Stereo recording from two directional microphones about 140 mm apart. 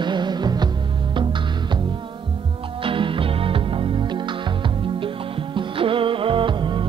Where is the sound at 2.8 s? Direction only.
40° right (ahead or behind).